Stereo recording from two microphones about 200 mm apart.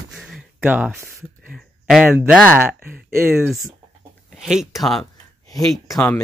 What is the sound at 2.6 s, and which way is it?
Speech, 10° right (ahead or behind).